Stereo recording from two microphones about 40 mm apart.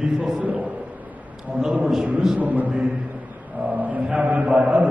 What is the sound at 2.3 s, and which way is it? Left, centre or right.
A man's voice, right.